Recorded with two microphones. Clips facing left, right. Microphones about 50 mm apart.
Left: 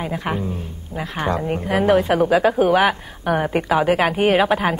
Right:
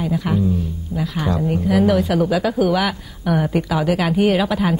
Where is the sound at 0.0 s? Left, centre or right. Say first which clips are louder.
Right 4 dB; left.